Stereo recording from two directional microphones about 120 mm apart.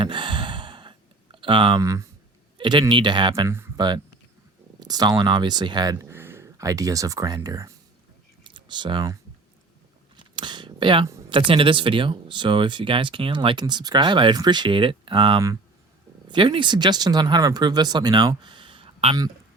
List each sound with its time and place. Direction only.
0.0 s sigh: 40° right (ahead or behind)
1.8 s speech: 25° right (ahead or behind)
2.6 s speech: 40° right (ahead or behind)
6.1 s speech: 20° right (ahead or behind); by 9.1 s 40° right (ahead or behind)
10.2 s a sound: 40° right (ahead or behind)
11.3 s speech: 45° right (ahead or behind)